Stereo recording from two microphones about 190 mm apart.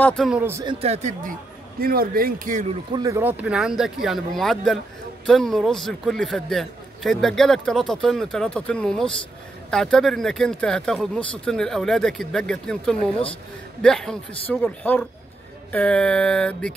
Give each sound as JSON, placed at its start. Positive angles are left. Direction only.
{"t": 0.4, "sound": "speech", "side_deg": -15}
{"t": 0.7, "sound": "speech", "side_deg": -35}
{"t": 1.8, "sound": "speech", "side_deg": -50}
{"t": 2.9, "sound": "a man's voice", "side_deg": -20}